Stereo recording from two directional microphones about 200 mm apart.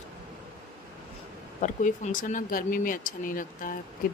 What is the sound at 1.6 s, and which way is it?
Speech, 40° left (ahead or behind).